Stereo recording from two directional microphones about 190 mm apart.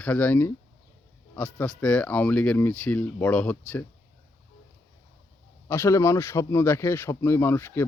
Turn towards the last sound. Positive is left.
turn(degrees=10)  # may be behind; listen again after turning